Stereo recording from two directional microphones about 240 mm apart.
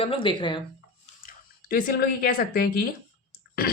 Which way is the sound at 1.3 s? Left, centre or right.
Left.